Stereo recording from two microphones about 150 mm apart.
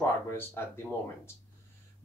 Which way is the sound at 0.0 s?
15° left (ahead or behind).